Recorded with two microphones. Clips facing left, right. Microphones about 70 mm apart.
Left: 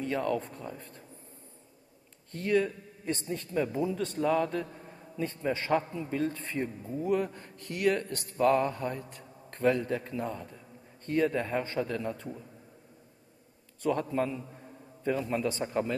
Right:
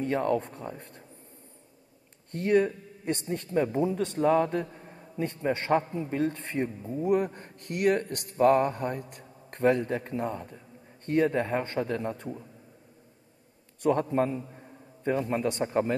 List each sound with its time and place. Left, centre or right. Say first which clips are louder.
0.0 s a man's voice: right 4 dB; right
2.3 s a man's voice: right 4 dB; right
5.1 s a man's voice: right 3 dB; right
7.2 s a man's voice: right 3 dB; right
7.5 s a man's voice: right 3 dB; right
14.1 s a man's voice: right 4 dB; right